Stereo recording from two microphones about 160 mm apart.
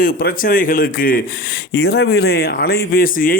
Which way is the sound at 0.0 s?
65° left (ahead or behind).